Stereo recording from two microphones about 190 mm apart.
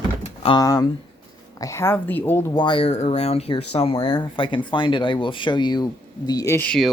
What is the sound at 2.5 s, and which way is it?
Speech, 25° left (ahead or behind).